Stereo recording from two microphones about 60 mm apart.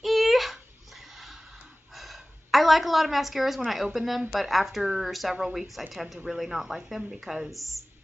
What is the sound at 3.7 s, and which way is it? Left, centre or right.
A woman's voice, centre.